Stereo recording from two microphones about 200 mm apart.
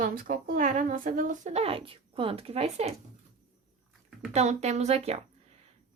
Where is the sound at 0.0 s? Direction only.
45° right (ahead or behind).